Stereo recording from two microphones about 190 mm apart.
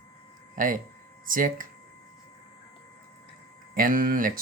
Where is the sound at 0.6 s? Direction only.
45° right (ahead or behind).